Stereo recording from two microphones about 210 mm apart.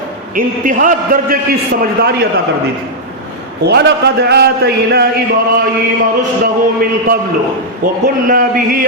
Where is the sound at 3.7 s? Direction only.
50° right (ahead or behind).